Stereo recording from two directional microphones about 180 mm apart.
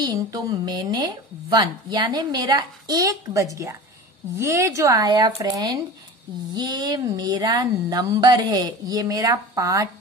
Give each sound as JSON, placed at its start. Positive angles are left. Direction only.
{"t": 0.0, "sound": "a woman's voice", "side_deg": -20}